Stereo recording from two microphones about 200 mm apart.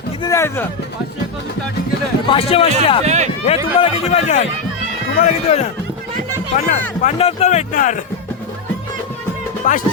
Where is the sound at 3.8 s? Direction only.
30° left (ahead or behind).